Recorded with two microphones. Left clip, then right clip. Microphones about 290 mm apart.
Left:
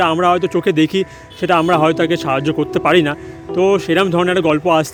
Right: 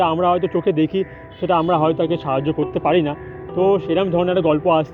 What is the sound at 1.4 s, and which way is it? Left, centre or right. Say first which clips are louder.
Speech: left 4 dB; left.